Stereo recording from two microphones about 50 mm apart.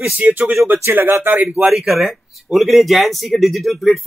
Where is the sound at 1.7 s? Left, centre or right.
Centre.